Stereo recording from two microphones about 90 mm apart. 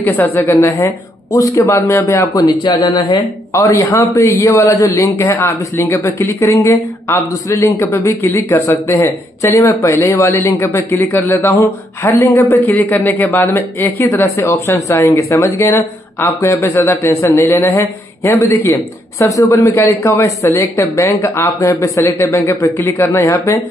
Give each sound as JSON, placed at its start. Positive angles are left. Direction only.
{"t": 0.0, "sound": "speech", "side_deg": 25}
{"t": 2.3, "sound": "speech", "side_deg": 55}
{"t": 3.5, "sound": "speech", "side_deg": 35}